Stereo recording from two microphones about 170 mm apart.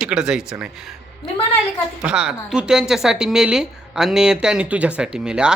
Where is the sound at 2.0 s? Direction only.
5° right (ahead or behind).